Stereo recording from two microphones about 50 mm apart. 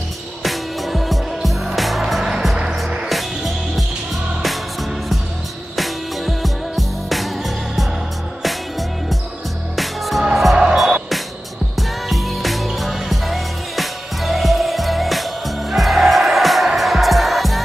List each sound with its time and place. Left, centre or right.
0.4 s music: centre
3.1 s music: centre
5.8 s music: centre
11.7 s music: centre